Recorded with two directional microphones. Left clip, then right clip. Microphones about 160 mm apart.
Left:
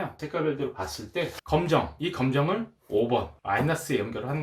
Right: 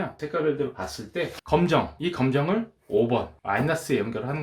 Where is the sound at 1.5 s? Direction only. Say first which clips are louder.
Right 2 dB; 40° right (ahead or behind).